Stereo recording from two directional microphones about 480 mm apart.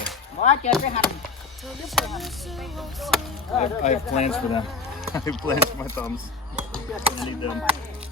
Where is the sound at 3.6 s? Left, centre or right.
Centre.